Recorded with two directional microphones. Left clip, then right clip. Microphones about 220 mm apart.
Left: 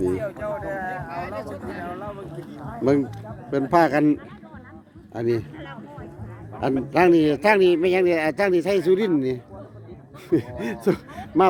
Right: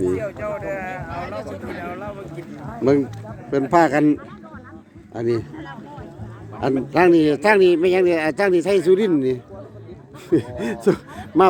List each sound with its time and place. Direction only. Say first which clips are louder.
0.1 s a sound: right 2 dB; 20° right (ahead or behind)
2.7 s a man's voice: right 3 dB; centre (ahead or behind)
6.9 s a man's voice: right 2 dB; 5° left (ahead or behind)